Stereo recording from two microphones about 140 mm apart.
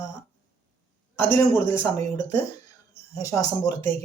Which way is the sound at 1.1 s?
15° left (ahead or behind).